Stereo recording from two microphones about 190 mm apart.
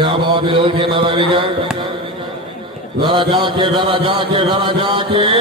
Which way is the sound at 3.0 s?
25° right (ahead or behind).